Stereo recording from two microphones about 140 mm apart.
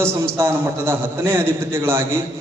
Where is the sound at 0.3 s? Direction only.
15° right (ahead or behind).